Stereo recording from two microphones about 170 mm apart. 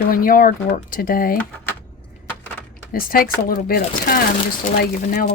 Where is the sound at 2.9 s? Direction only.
60° left (ahead or behind).